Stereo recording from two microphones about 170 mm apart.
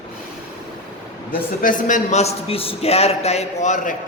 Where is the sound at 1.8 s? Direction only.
50° left (ahead or behind).